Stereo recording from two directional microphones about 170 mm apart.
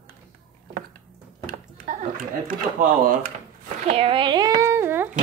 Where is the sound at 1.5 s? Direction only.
50° right (ahead or behind).